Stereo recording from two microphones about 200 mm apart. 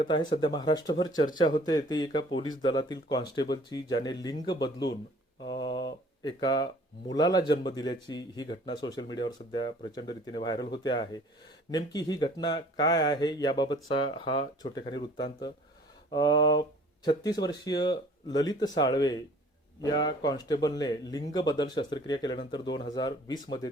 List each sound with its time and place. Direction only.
0.0 s speech: 20° left (ahead or behind)
5.4 s a sound: 25° left (ahead or behind)
6.2 s speech: 20° left (ahead or behind)